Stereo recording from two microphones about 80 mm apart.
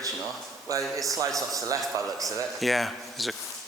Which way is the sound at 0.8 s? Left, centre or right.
Centre.